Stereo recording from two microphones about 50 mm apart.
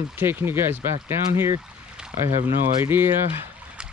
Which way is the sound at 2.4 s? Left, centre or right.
Right.